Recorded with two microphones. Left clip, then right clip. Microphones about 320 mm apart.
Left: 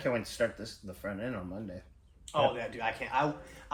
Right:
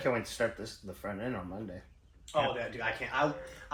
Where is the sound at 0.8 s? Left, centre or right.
Centre.